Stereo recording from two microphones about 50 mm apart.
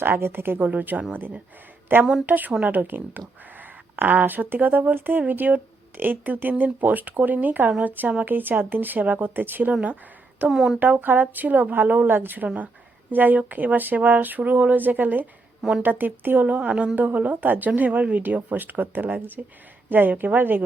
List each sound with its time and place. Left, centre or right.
0.0 s a woman's voice: right
0.7 s speech: right
1.9 s a woman's voice: right
10.5 s speech: centre
10.8 s speech: right
16.5 s a woman's voice: right